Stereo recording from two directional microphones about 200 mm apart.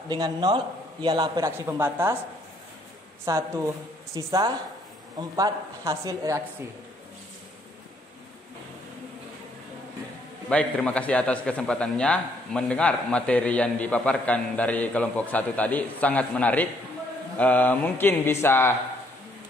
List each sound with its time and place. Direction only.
0.1 s a man's voice: 20° right (ahead or behind)
3.3 s speech: 15° right (ahead or behind)
10.5 s a man's voice: 5° left (ahead or behind)